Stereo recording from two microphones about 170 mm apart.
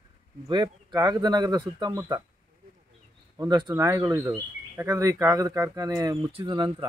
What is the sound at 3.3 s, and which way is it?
Speech, 25° right (ahead or behind).